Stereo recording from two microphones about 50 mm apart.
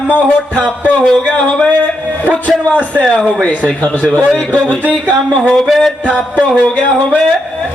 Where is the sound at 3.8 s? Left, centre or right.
Left.